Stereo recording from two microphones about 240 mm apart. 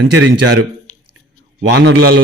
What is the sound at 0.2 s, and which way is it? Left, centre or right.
Speech, right.